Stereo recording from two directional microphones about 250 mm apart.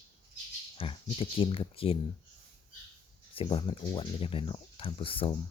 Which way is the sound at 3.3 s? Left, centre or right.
Left.